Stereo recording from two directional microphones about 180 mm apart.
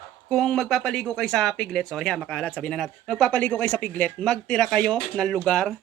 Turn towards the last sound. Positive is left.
turn(degrees=5)  # may be behind; listen again after turning